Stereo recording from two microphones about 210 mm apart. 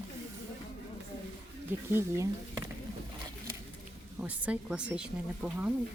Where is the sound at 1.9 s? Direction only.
10° right (ahead or behind).